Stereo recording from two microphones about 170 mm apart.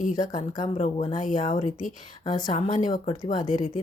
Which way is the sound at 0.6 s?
45° left (ahead or behind).